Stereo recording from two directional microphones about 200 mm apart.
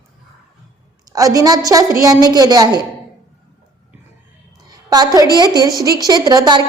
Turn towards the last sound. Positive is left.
turn(degrees=-20)  # may be behind; listen again after turning